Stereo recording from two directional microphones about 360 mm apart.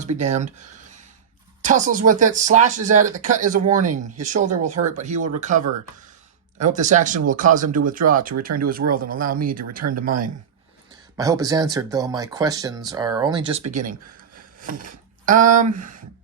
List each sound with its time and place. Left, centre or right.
0.0 s speech: centre
1.6 s speech: right
11.2 s speech: centre
14.6 s a sound: right
15.3 s speech: right